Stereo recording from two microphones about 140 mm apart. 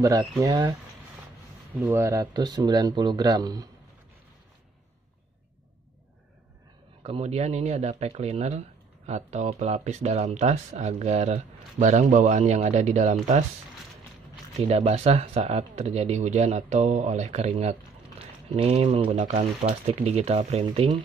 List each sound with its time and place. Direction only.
0.0 s speech: 25° right (ahead or behind)
1.7 s speech: 15° right (ahead or behind)
7.0 s speech: 45° right (ahead or behind)
14.7 s speech: 50° right (ahead or behind)